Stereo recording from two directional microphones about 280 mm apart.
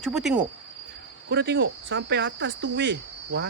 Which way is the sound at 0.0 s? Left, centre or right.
Centre.